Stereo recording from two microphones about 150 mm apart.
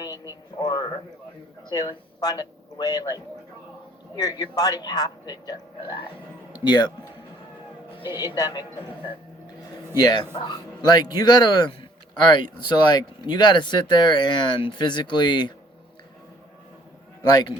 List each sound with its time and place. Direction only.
0.0 s a sound: 25° left (ahead or behind)
1.7 s speech: 30° left (ahead or behind)
8.4 s speech: 25° left (ahead or behind)
9.9 s speech: 30° left (ahead or behind)
17.2 s speech: 25° left (ahead or behind)